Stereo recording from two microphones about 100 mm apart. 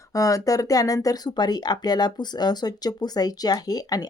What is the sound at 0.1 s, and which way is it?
Speech, 35° left (ahead or behind).